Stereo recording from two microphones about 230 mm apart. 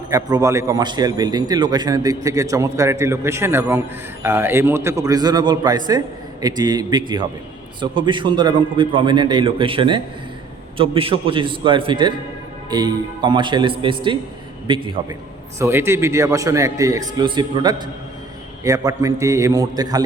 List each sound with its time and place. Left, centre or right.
0.1 s a man's voice: centre
15.5 s a man's voice: centre